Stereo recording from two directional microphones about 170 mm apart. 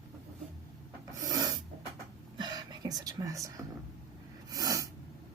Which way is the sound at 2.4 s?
25° right (ahead or behind).